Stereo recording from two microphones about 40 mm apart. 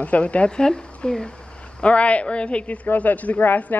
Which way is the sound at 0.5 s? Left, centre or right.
Centre.